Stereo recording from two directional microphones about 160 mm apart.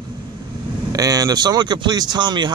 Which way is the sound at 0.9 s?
20° right (ahead or behind).